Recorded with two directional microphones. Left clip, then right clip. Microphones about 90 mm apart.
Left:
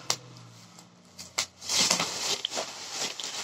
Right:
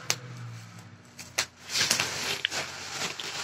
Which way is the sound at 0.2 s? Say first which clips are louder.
Right 4 dB; 30° right (ahead or behind).